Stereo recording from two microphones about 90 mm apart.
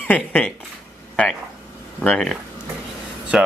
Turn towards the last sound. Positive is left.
turn(degrees=-10)  # may be behind; listen again after turning